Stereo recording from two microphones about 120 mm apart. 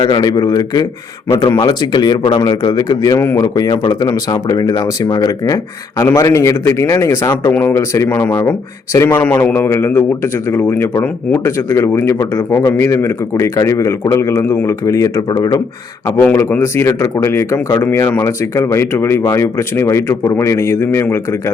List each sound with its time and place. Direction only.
0.1 s speech: 35° left (ahead or behind)
6.0 s speech: 25° left (ahead or behind)
9.2 s a man's voice: 15° left (ahead or behind); by 15.6 s 35° left (ahead or behind)
16.2 s speech: 20° left (ahead or behind)